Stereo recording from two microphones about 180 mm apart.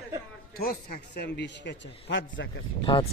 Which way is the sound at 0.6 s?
55° left (ahead or behind).